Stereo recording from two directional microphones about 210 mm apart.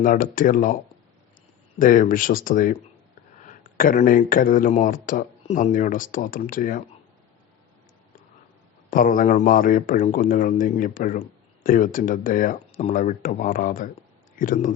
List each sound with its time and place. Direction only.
0.0 s a man's voice: 40° left (ahead or behind)
1.8 s a man's voice: 40° left (ahead or behind)
8.9 s a man's voice: 40° left (ahead or behind)